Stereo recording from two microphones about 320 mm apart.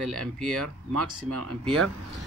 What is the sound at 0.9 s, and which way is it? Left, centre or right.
Speech, right.